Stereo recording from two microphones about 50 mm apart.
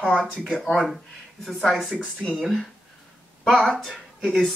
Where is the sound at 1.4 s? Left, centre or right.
Centre.